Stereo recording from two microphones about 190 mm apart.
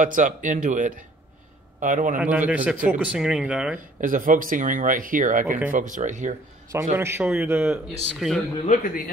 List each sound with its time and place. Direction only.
0.0 s speech: 40° right (ahead or behind)
2.1 s a man's voice: 10° right (ahead or behind)
4.0 s speech: 45° right (ahead or behind)
6.7 s a man's voice: 15° right (ahead or behind)
8.2 s speech: centre (ahead or behind)
8.6 s a man's voice: 45° left (ahead or behind)